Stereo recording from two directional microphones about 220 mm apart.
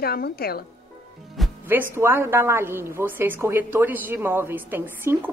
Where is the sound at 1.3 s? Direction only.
5° right (ahead or behind).